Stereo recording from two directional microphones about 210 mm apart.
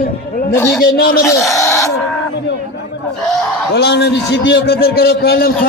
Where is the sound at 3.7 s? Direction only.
50° left (ahead or behind).